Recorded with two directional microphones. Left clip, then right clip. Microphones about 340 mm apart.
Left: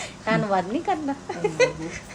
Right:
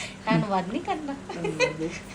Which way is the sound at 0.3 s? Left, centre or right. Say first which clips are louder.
Left 3 dB; left.